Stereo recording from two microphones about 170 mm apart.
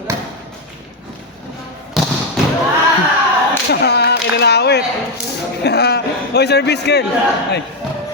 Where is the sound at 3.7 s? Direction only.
75° left (ahead or behind).